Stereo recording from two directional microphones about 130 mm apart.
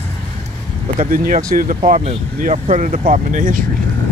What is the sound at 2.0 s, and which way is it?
Speech, 80° right.